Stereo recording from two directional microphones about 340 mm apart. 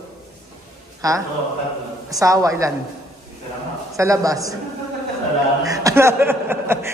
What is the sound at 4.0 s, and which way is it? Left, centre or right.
Speech, centre.